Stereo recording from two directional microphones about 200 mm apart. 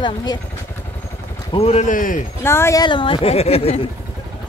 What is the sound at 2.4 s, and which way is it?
Speech, 10° left (ahead or behind).